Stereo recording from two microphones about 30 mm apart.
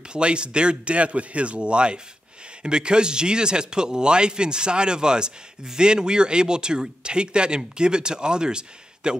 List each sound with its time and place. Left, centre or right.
0.1 s a man's voice: right